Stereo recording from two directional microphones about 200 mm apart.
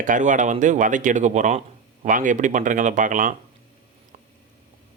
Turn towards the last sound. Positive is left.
turn(degrees=-40)  # may be behind; listen again after turning